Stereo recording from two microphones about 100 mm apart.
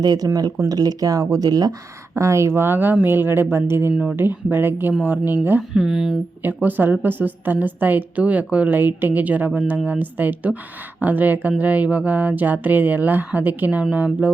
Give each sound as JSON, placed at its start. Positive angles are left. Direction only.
{"t": 0.0, "sound": "speech", "side_deg": -40}
{"t": 2.1, "sound": "a woman's voice", "side_deg": -30}
{"t": 5.7, "sound": "speech", "side_deg": -5}
{"t": 6.4, "sound": "a woman's voice", "side_deg": -20}